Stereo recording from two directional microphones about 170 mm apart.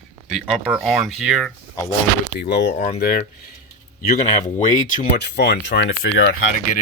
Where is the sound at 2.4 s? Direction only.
90° left.